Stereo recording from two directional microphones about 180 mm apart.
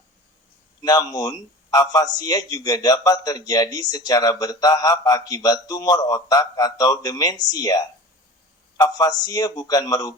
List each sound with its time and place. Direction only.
0.8 s a man's voice: 20° left (ahead or behind)